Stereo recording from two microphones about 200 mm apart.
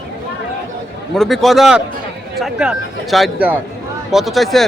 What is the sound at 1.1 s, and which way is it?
A man's voice, centre (ahead or behind).